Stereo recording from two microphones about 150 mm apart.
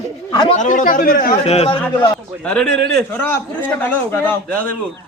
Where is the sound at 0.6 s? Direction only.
60° left (ahead or behind); by 1.4 s 75° left (ahead or behind).